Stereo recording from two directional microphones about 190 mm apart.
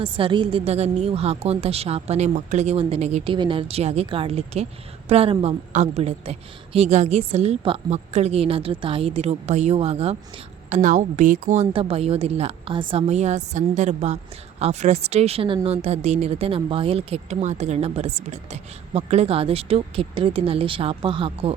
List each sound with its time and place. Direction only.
0.0 s speech: 25° right (ahead or behind)
3.3 s speech: 25° right (ahead or behind)